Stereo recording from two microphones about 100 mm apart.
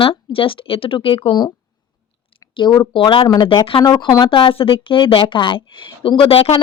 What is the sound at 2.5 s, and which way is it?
Speech, 50° left (ahead or behind).